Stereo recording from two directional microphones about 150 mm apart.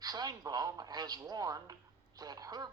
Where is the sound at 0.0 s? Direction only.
25° right (ahead or behind).